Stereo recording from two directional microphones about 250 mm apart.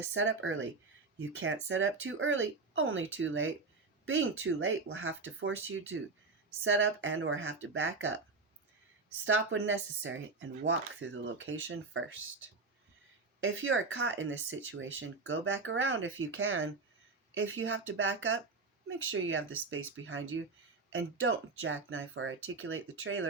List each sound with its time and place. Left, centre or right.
0.1 s speech: right
9.2 s speech: right